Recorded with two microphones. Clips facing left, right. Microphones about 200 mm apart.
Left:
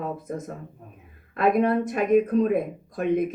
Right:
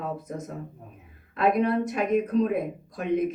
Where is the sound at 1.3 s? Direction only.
50° left (ahead or behind).